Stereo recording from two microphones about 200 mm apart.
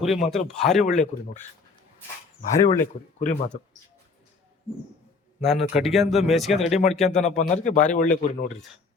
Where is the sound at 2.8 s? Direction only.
40° left (ahead or behind).